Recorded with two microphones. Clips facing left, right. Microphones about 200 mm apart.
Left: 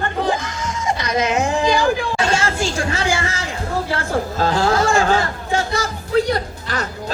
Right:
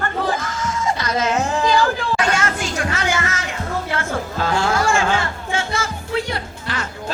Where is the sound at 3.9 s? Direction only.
35° left (ahead or behind).